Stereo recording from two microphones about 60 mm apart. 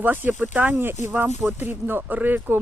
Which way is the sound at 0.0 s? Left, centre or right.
Right.